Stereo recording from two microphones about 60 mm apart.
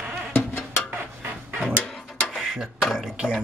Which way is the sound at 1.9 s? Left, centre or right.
Centre.